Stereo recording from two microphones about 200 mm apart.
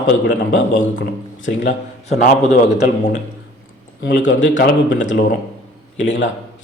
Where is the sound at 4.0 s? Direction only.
65° left (ahead or behind).